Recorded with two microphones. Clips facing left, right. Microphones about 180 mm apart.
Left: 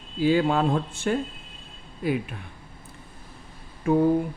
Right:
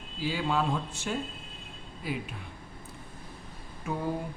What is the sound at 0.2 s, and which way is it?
Speech, 55° left (ahead or behind).